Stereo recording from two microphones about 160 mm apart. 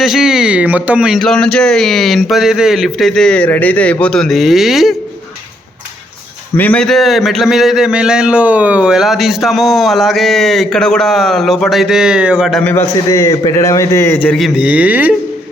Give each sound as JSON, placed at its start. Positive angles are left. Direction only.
{"t": 0.0, "sound": "a man's voice", "side_deg": 0}
{"t": 6.6, "sound": "a man's voice", "side_deg": 5}
{"t": 12.6, "sound": "a man's voice", "side_deg": 15}
{"t": 14.3, "sound": "speech", "side_deg": 0}